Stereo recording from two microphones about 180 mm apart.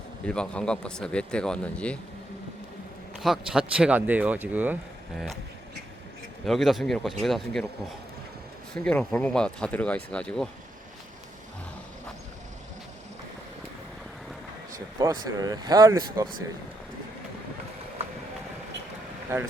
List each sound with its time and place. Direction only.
0.3 s speech: 5° left (ahead or behind)
3.2 s speech: 5° right (ahead or behind)
6.4 s speech: centre (ahead or behind)
8.7 s speech: 5° left (ahead or behind)
14.9 s speech: 20° right (ahead or behind)
19.3 s speech: 15° right (ahead or behind)